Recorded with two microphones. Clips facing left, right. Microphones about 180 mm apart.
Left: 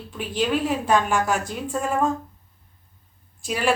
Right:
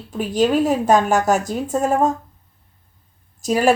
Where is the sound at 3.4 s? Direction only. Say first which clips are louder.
Right 8 dB; 40° right (ahead or behind).